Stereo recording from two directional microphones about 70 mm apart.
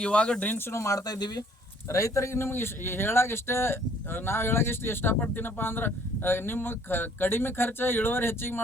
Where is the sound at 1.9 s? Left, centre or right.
Left.